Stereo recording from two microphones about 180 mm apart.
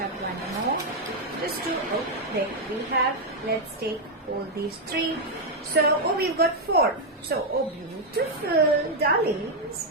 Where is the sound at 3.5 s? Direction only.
60° right (ahead or behind).